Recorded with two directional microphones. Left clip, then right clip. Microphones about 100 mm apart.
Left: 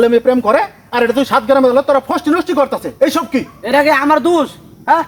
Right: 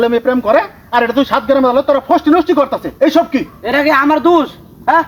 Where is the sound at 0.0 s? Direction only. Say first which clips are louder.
Left 2 dB; 30° left (ahead or behind).